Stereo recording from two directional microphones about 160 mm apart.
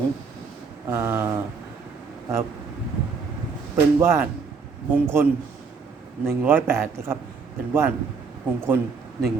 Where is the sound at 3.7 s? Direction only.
15° right (ahead or behind).